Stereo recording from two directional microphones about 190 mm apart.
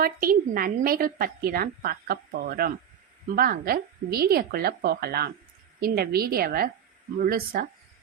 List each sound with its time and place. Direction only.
0.0 s a woman's voice: 50° right (ahead or behind)